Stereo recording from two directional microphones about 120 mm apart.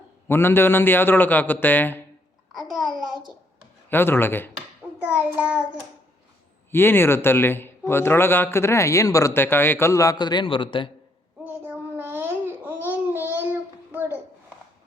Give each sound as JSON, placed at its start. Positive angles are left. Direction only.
{"t": 0.3, "sound": "a man's voice", "side_deg": 20}
{"t": 2.5, "sound": "a child's voice", "side_deg": 0}
{"t": 3.8, "sound": "a man's voice", "side_deg": 20}
{"t": 4.9, "sound": "child singing", "side_deg": -15}
{"t": 6.7, "sound": "speech", "side_deg": 20}
{"t": 11.9, "sound": "babbling", "side_deg": -15}